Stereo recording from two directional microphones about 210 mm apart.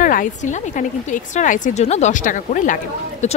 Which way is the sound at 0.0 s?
40° left (ahead or behind).